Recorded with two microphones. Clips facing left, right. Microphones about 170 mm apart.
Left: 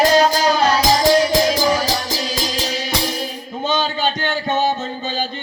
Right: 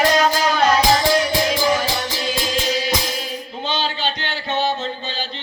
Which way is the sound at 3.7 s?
45° left (ahead or behind).